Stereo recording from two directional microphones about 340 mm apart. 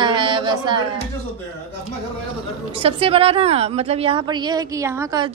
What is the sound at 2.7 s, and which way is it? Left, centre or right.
A woman's voice, centre.